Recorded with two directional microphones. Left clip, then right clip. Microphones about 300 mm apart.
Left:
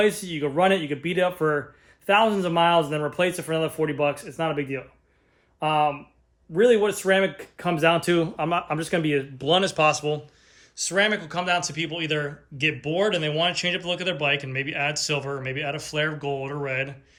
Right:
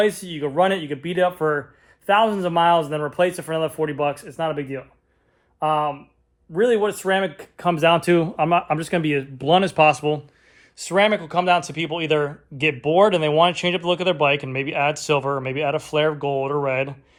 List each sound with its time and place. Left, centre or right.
0.3 s speech: centre
5.5 s speech: centre